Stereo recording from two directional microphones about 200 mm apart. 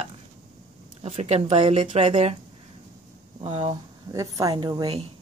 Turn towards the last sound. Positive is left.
turn(degrees=-25)  # may be behind; listen again after turning